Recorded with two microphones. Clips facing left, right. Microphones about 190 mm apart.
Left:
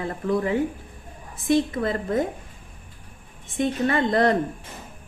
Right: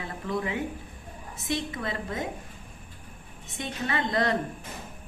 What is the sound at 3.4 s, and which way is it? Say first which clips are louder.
Speech: left 10 dB; 50° left (ahead or behind).